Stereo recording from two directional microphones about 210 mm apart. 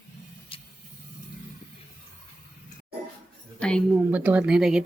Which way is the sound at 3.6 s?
5° left (ahead or behind).